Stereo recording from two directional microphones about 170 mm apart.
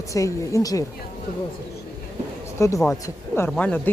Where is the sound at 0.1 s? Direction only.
20° left (ahead or behind).